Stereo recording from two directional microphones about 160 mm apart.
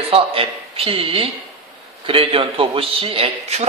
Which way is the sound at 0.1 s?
35° right (ahead or behind).